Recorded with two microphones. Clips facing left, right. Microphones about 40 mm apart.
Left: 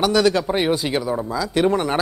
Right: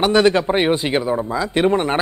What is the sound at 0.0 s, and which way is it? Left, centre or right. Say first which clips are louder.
Speech: right 3 dB; right.